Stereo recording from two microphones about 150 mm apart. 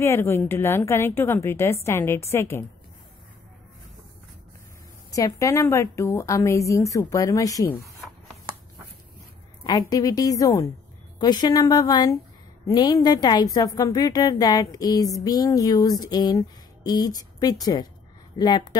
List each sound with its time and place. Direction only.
0.0 s a woman's voice: 15° left (ahead or behind)
5.1 s a woman's voice: 20° left (ahead or behind)
9.6 s a woman's voice: 25° left (ahead or behind)